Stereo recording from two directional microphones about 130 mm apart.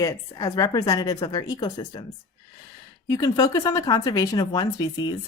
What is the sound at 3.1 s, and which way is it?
Speech, 30° left (ahead or behind).